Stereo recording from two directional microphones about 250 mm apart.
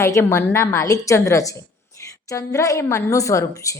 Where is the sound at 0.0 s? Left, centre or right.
Centre.